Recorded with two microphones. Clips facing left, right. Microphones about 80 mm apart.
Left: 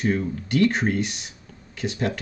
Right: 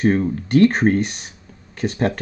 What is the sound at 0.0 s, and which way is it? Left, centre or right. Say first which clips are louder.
Speech: right 6 dB; right.